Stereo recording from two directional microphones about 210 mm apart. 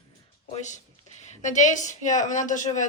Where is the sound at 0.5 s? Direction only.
35° left (ahead or behind).